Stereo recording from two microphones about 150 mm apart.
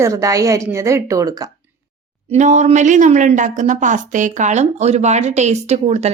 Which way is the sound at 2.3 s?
50° right (ahead or behind).